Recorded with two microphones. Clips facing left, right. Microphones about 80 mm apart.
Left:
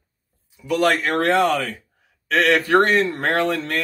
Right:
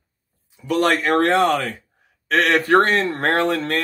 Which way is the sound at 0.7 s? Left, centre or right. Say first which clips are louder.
Right 1 dB; right.